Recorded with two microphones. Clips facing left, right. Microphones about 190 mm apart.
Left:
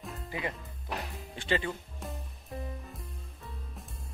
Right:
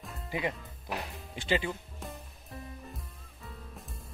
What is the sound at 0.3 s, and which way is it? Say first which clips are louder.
Speech: right 3 dB; 20° right (ahead or behind).